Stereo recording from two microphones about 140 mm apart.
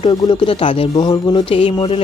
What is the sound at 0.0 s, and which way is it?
Speech, 35° left (ahead or behind).